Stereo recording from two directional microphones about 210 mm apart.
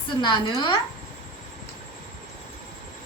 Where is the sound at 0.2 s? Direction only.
20° left (ahead or behind).